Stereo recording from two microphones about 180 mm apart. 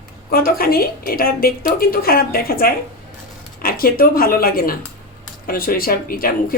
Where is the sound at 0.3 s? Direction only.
55° left (ahead or behind).